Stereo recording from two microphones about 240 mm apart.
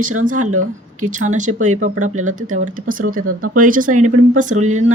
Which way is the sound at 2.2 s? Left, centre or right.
Right.